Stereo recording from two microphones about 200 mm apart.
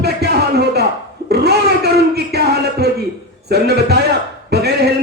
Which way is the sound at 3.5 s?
55° right (ahead or behind).